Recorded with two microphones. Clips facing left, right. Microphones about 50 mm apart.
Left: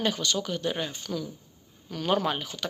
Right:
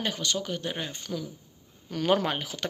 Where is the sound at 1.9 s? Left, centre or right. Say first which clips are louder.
Right 2 dB; right.